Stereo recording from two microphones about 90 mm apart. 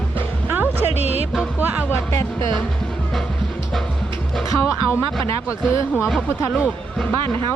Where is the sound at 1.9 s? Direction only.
30° left (ahead or behind).